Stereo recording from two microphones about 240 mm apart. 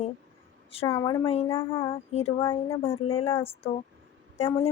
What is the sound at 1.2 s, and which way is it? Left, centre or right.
Speech, left.